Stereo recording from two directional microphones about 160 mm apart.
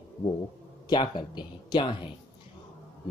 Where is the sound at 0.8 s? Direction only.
25° left (ahead or behind).